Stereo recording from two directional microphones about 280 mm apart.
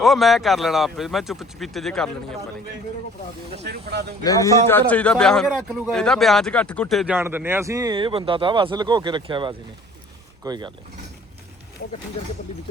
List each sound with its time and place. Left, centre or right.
0.0 s a man's voice: centre
3.6 s speech: right
4.2 s a man's voice: centre